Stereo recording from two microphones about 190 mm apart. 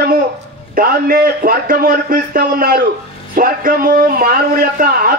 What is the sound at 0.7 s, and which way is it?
Speech, 50° right (ahead or behind).